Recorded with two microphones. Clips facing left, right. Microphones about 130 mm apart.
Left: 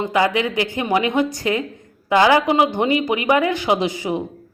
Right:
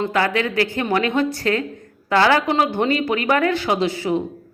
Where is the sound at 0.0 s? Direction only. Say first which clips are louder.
Left 1 dB; 15° left (ahead or behind).